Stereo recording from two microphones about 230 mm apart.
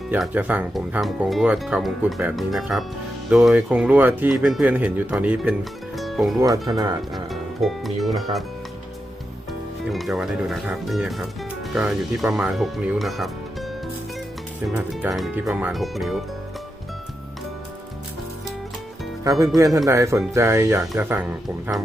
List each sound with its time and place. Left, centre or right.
0.1 s speech: centre
6.0 s music: centre
6.4 s speech: centre
7.1 s speech: centre
9.9 s speech: centre
19.2 s speech: centre